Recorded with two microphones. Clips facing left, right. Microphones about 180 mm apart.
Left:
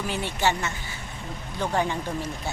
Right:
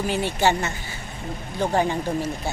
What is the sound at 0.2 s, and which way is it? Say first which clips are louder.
Speech: right 3 dB; 40° right (ahead or behind).